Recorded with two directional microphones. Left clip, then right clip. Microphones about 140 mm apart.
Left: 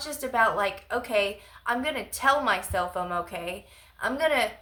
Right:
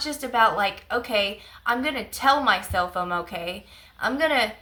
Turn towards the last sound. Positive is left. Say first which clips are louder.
# right 3 dB
turn(degrees=25)  # may be behind; listen again after turning